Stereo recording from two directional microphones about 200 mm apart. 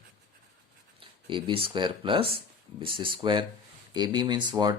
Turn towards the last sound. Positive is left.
turn(degrees=-20)  # may be behind; listen again after turning